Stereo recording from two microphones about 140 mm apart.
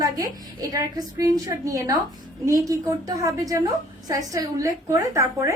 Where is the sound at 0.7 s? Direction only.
25° right (ahead or behind).